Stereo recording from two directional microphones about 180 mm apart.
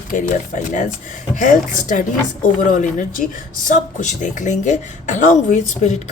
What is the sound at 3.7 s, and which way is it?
Speech, 45° left (ahead or behind).